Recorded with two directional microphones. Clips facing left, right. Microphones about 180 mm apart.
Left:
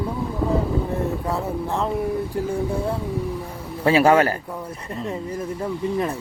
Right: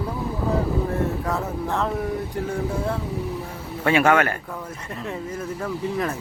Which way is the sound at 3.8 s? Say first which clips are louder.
Left 3 dB; 30° left (ahead or behind).